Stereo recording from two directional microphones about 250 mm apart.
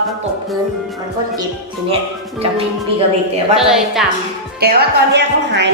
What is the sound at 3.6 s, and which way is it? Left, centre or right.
Speech, centre.